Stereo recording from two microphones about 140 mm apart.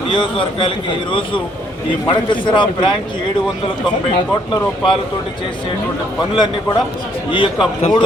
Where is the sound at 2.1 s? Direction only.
35° left (ahead or behind).